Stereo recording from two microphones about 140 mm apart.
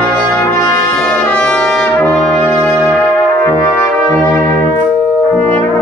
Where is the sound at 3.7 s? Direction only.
15° left (ahead or behind).